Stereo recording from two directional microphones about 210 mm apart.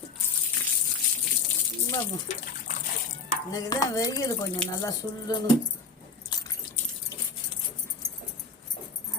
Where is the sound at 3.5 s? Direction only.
15° left (ahead or behind).